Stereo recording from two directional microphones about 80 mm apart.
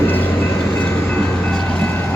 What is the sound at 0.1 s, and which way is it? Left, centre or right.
Train, left.